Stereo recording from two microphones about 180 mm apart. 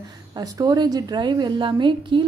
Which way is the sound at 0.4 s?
20° right (ahead or behind).